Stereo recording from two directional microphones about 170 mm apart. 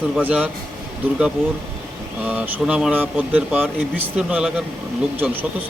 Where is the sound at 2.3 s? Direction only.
10° right (ahead or behind).